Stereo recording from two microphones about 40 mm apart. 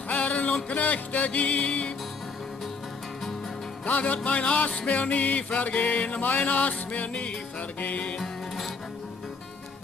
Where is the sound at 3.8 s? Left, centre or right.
Left.